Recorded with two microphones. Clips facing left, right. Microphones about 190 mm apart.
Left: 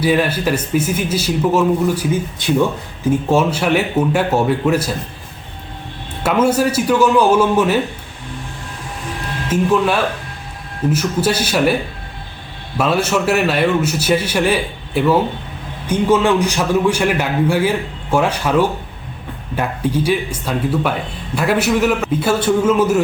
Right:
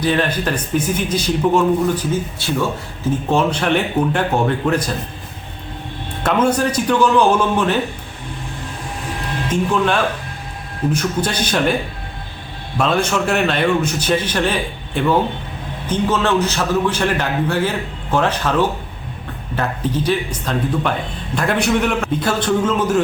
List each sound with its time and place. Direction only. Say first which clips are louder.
0.0 s a man's voice: left 2 dB; 10° left (ahead or behind)
2.4 s a man's voice: left 8 dB; 15° left (ahead or behind)
3.2 s a man's voice: even; 5° left (ahead or behind)
6.2 s a man's voice: left 2 dB; 5° left (ahead or behind)
9.5 s a man's voice: left 3 dB; 5° left (ahead or behind)
12.7 s a man's voice: left 1 dB; 5° left (ahead or behind)